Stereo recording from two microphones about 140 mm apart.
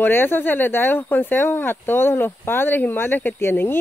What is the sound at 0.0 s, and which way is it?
Speech, 15° left (ahead or behind).